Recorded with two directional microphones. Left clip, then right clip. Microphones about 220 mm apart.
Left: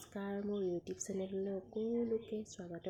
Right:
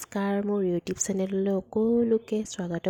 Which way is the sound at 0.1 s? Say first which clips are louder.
Right 13 dB; 40° right (ahead or behind).